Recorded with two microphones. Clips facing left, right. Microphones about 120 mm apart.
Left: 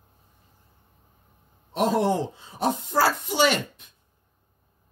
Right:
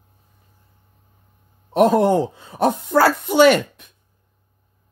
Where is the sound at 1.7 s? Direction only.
55° right (ahead or behind).